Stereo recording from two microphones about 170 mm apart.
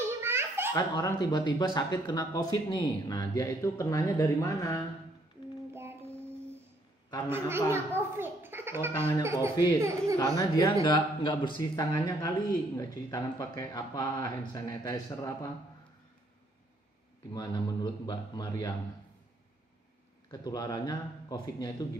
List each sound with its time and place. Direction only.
0.0 s baby laughter: 15° right (ahead or behind)
0.7 s speech: 20° left (ahead or behind)
5.7 s child singing: 15° right (ahead or behind)
7.2 s speech: 15° right (ahead or behind)
7.7 s a sound: 15° right (ahead or behind)
9.2 s speech: 15° right (ahead or behind)
10.1 s speech: 20° left (ahead or behind)
17.3 s speech: 25° left (ahead or behind)
20.2 s speech: 20° left (ahead or behind)